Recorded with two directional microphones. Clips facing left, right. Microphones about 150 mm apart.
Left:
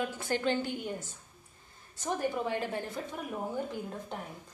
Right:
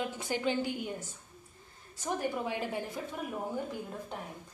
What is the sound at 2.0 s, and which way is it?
A woman's voice, 10° right (ahead or behind).